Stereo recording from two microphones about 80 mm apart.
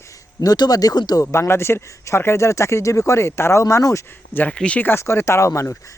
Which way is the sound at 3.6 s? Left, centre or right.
Left.